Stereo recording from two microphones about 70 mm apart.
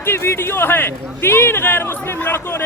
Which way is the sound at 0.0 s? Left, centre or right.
Left.